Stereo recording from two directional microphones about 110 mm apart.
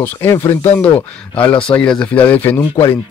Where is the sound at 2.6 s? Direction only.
30° left (ahead or behind).